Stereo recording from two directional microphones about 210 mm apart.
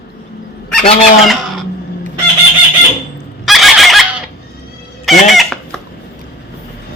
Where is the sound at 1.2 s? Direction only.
Centre (ahead or behind).